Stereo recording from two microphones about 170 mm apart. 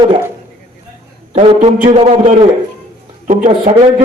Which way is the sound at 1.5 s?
35° right (ahead or behind).